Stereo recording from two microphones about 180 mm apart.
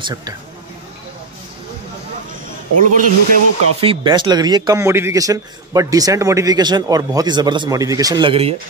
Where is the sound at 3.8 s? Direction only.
30° right (ahead or behind).